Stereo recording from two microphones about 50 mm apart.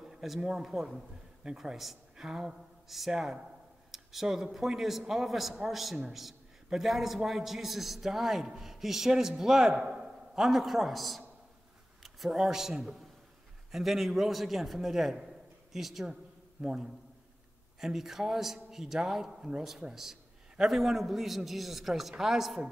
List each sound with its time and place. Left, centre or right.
0.0 s a man's voice: centre
15.2 s a sound: centre
16.6 s a man's voice: centre